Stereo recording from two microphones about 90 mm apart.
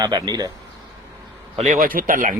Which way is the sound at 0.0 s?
50° right (ahead or behind).